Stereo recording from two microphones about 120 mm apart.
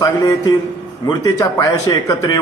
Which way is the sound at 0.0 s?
30° left (ahead or behind).